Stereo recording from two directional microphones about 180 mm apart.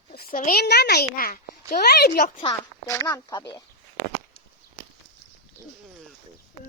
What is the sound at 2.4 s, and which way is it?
Speech, 20° left (ahead or behind).